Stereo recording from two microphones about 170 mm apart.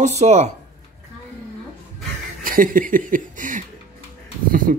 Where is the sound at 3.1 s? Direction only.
50° right (ahead or behind).